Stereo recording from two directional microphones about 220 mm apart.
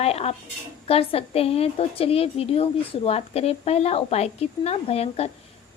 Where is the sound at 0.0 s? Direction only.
30° left (ahead or behind).